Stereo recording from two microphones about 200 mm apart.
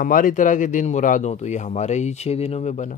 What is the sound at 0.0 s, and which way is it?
A man's voice, 45° left (ahead or behind).